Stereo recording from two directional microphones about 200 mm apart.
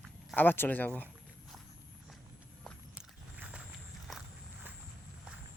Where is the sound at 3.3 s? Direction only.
5° right (ahead or behind).